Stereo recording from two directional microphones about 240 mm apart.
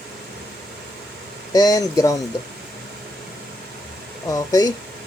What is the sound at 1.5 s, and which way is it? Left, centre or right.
Speech, centre.